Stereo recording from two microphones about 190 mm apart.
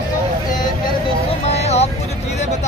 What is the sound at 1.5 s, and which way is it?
Speech, 35° left (ahead or behind).